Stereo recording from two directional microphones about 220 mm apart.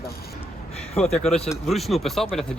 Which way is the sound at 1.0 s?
5° left (ahead or behind).